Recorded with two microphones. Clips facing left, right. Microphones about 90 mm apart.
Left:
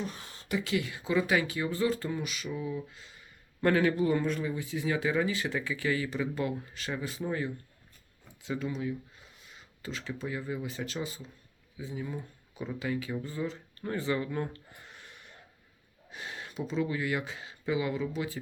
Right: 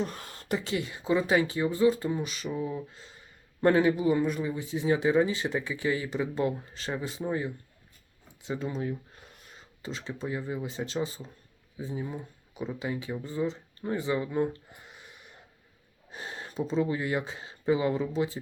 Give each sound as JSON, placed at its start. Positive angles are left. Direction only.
{"t": 0.0, "sound": "a sound", "side_deg": -50}
{"t": 0.5, "sound": "speech", "side_deg": -30}
{"t": 3.9, "sound": "speech", "side_deg": -10}
{"t": 8.3, "sound": "a sound", "side_deg": -25}
{"t": 9.6, "sound": "speech", "side_deg": -25}
{"t": 16.1, "sound": "speech", "side_deg": -35}